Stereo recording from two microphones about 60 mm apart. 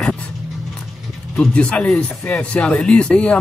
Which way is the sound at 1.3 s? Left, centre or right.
Centre.